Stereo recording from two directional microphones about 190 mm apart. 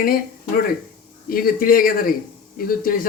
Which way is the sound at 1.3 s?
50° left (ahead or behind).